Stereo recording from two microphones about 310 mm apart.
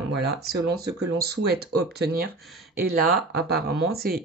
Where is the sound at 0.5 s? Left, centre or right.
Right.